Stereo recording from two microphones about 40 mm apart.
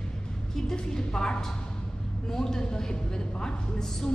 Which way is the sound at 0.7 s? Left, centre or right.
Centre.